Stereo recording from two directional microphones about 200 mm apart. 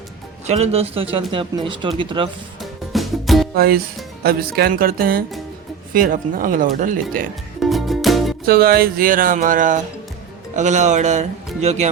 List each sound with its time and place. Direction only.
0.4 s speech: 30° right (ahead or behind)
2.6 s music: centre (ahead or behind)
3.5 s speech: 50° right (ahead or behind)
7.6 s music: centre (ahead or behind)
8.4 s speech: 50° right (ahead or behind); by 11.9 s 35° right (ahead or behind)